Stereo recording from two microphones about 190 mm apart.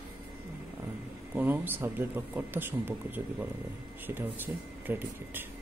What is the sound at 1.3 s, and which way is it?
Speech, 10° right (ahead or behind).